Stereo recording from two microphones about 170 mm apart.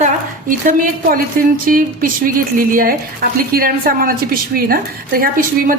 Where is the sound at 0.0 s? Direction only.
55° right (ahead or behind).